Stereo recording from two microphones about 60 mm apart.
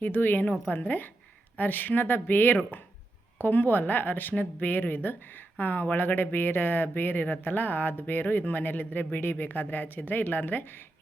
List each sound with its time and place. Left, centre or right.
0.0 s a woman's voice: left